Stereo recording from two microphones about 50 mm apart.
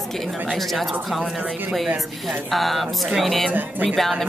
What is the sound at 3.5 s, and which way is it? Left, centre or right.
Speech, right.